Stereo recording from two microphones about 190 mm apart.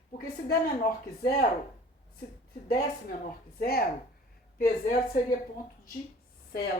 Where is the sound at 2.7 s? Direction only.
55° left (ahead or behind).